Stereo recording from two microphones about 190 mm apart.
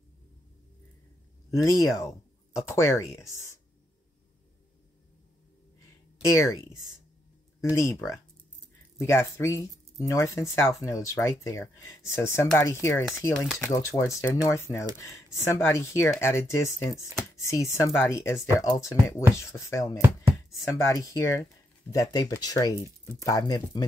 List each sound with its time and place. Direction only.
1.5 s speech: 15° left (ahead or behind)
6.3 s speech: 15° left (ahead or behind)